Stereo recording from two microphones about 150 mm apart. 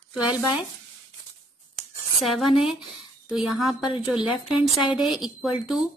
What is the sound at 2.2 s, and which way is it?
Speech, centre (ahead or behind).